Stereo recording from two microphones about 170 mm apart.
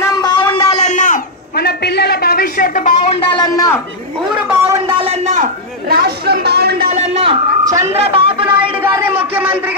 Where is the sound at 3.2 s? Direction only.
30° left (ahead or behind).